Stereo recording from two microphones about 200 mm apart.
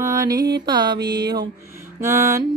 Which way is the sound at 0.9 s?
55° right (ahead or behind).